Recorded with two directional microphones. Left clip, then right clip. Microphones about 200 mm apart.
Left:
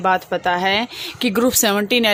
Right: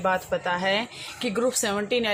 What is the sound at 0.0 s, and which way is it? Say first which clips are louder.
A woman's voice: left 7 dB; 50° left (ahead or behind).